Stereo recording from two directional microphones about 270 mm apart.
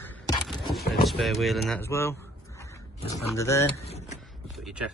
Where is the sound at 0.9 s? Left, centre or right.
Centre.